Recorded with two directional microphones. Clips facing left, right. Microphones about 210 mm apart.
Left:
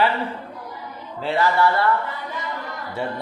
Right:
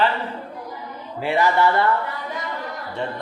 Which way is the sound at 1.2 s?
15° right (ahead or behind).